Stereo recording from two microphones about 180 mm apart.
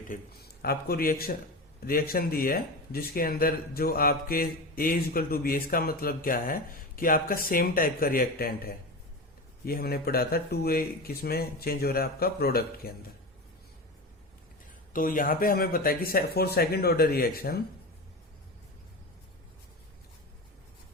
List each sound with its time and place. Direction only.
0.1 s speech: 60° left (ahead or behind)
14.9 s speech: 50° left (ahead or behind)